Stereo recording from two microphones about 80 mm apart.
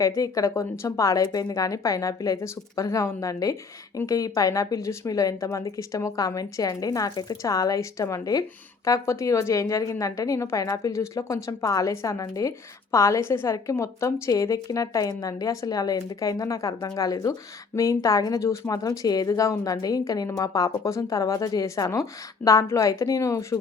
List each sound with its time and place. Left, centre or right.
0.2 s a woman's voice: left
18.4 s a woman's voice: left